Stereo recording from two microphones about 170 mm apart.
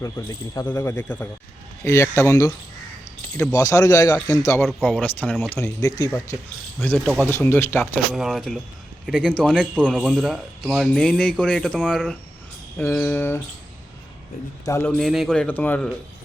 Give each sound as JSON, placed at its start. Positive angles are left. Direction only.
{"t": 0.0, "sound": "a man's voice", "side_deg": 20}
{"t": 3.5, "sound": "a man's voice", "side_deg": 20}
{"t": 6.8, "sound": "speech", "side_deg": 10}
{"t": 8.1, "sound": "a man's voice", "side_deg": 0}
{"t": 14.6, "sound": "speech", "side_deg": 15}
{"t": 14.9, "sound": "a man's voice", "side_deg": 0}